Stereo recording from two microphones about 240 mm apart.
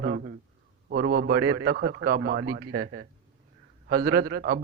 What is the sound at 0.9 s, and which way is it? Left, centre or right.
A man's voice, right.